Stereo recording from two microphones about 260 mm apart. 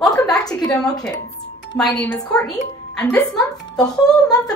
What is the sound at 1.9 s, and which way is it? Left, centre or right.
Speech, centre.